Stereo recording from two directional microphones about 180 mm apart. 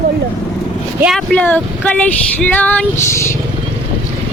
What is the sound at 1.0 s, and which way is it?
Female singing, centre (ahead or behind).